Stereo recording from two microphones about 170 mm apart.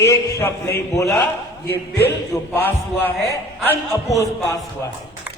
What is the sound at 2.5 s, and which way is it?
A man's voice, 10° left (ahead or behind).